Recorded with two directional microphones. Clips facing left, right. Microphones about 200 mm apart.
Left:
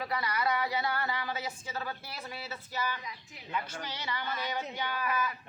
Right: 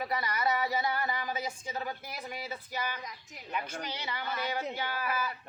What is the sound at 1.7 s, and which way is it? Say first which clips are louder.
A woman's voice: right 1 dB; 15° right (ahead or behind).